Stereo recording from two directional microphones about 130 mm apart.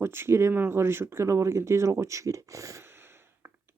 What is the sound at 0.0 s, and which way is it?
Speech, 20° right (ahead or behind).